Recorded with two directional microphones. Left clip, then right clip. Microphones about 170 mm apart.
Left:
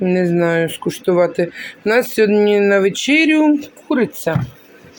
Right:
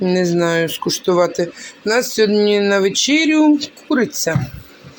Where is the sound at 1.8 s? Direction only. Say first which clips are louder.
Left 1 dB; 10° left (ahead or behind).